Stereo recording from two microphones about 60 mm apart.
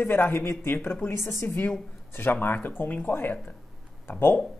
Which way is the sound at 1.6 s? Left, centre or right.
Left.